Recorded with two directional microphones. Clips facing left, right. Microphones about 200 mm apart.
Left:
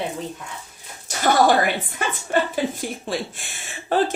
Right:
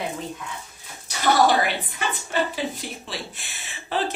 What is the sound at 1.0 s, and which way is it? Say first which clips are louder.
Dog: left 2 dB; 50° left (ahead or behind).